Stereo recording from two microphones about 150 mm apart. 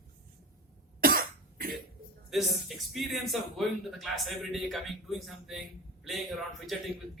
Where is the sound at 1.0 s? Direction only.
80° right.